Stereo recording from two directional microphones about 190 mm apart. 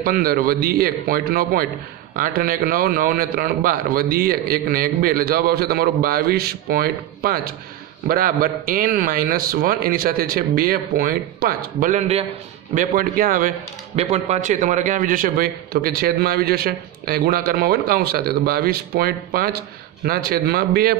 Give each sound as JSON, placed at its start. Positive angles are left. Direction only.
{"t": 0.0, "sound": "a man's voice", "side_deg": -50}
{"t": 13.9, "sound": "a man's voice", "side_deg": -35}